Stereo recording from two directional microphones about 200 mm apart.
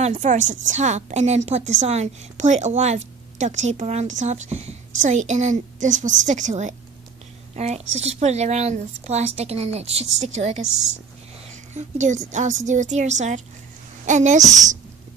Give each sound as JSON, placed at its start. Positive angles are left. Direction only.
{"t": 0.0, "sound": "a woman's voice", "side_deg": -35}
{"t": 11.7, "sound": "a woman's voice", "side_deg": -35}